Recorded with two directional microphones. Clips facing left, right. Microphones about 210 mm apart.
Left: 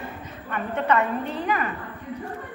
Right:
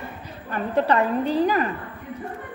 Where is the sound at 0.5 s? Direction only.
35° right (ahead or behind).